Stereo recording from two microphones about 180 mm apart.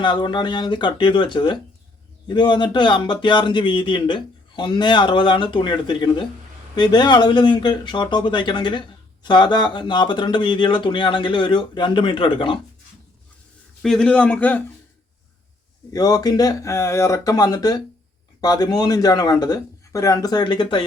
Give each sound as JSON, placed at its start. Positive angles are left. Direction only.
{"t": 0.0, "sound": "speech", "side_deg": 25}
{"t": 13.8, "sound": "a man's voice", "side_deg": 5}
{"t": 15.9, "sound": "speech", "side_deg": 20}